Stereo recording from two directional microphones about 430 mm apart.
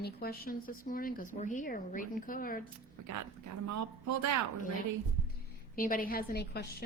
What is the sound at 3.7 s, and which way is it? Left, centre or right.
Speech, right.